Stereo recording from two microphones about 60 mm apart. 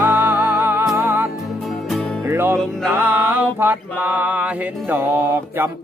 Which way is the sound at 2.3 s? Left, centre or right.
Right.